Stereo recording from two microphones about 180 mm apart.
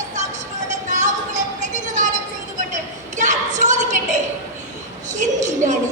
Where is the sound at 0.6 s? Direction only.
40° right (ahead or behind).